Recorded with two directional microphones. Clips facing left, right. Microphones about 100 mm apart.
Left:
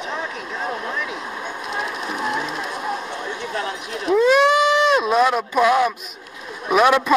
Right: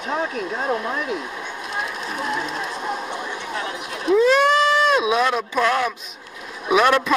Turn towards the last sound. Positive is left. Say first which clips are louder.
# left 1 dB
turn(degrees=5)  # may be behind; listen again after turning